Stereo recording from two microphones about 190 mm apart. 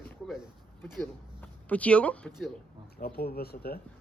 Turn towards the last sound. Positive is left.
turn(degrees=50)  # may be behind; listen again after turning